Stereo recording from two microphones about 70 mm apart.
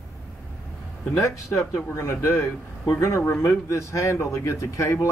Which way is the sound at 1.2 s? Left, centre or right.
Left.